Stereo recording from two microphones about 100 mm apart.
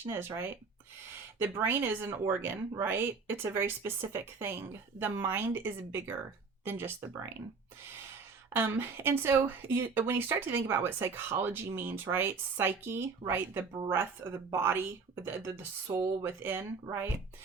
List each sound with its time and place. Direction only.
0.0 s speech: 25° right (ahead or behind)
8.4 s speech: 25° right (ahead or behind)